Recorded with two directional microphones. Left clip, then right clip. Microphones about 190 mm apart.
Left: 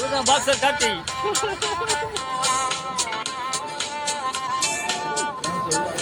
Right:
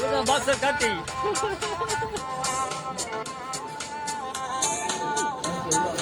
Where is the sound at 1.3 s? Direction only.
50° left (ahead or behind).